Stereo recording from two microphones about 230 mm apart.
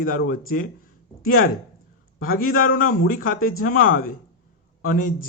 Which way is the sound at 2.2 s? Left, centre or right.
Left.